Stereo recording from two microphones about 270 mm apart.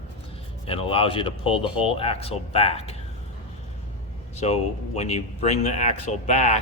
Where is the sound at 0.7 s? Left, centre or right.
Centre.